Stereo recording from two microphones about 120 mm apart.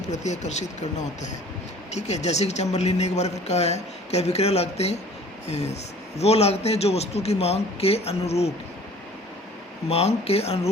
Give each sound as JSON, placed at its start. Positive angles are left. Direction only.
{"t": 0.0, "sound": "speech", "side_deg": 75}
{"t": 9.9, "sound": "speech", "side_deg": 60}